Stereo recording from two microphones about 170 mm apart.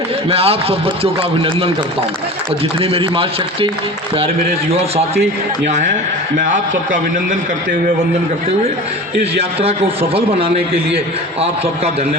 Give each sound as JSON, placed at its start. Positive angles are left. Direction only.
{"t": 0.3, "sound": "a man's voice", "side_deg": -35}
{"t": 2.8, "sound": "a man's voice", "side_deg": -35}
{"t": 4.7, "sound": "a man's voice", "side_deg": -35}
{"t": 9.4, "sound": "a man's voice", "side_deg": -35}